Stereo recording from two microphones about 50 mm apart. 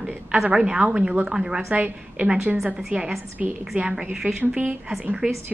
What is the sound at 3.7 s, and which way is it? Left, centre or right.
Speech, right.